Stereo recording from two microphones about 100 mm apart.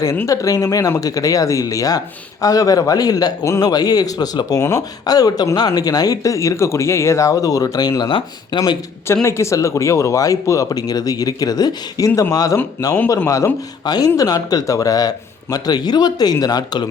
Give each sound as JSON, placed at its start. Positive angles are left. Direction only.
{"t": 0.3, "sound": "a man's voice", "side_deg": 35}
{"t": 9.2, "sound": "a man's voice", "side_deg": 30}